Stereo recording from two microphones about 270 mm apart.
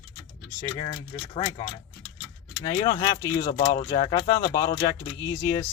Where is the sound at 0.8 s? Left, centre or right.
Left.